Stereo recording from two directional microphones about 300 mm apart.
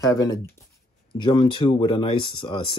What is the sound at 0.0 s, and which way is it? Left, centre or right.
Speech, centre.